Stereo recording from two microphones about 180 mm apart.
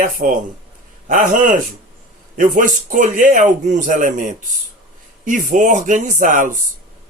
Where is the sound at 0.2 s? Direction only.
45° right (ahead or behind).